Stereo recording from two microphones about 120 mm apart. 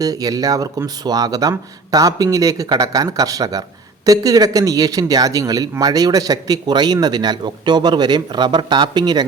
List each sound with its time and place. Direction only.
0.0 s a man's voice: 30° right (ahead or behind)